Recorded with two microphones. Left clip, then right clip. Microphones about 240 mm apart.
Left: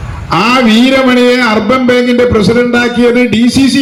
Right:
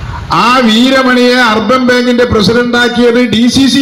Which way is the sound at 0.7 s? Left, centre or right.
Centre.